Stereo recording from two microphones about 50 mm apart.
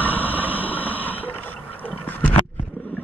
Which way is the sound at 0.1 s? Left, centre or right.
Right.